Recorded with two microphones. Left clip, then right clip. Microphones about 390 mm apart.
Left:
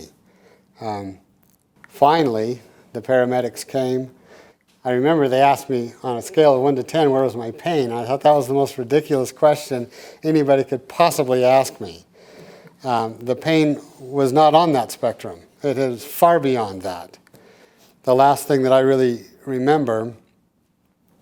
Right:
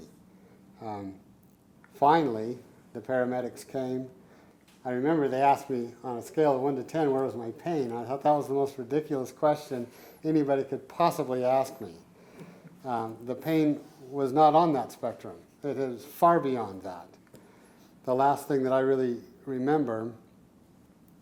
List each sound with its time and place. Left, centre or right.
0.8 s speech: left